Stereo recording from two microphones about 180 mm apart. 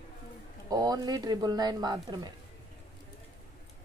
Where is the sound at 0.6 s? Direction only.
20° right (ahead or behind).